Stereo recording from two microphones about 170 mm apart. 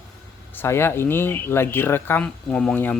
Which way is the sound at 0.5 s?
15° left (ahead or behind).